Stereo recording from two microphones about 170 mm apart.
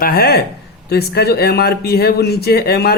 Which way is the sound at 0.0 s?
65° left (ahead or behind).